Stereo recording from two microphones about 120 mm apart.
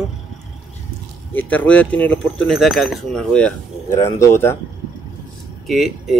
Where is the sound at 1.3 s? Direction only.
15° left (ahead or behind).